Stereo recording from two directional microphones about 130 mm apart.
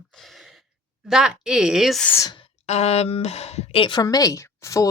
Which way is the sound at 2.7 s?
55° left (ahead or behind).